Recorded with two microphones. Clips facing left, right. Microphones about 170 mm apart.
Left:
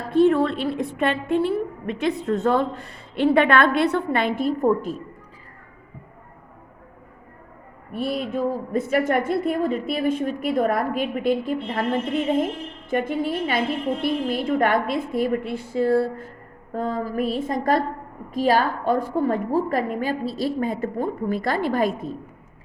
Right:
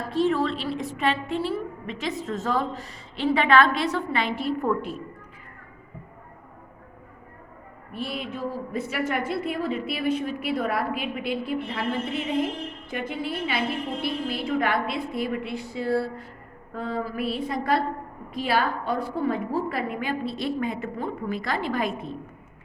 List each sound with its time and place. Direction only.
0.1 s a woman's voice: 55° left (ahead or behind)
7.9 s a woman's voice: 45° left (ahead or behind)